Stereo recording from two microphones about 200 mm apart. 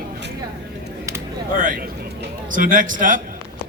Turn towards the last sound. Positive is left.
turn(degrees=-40)  # may be behind; listen again after turning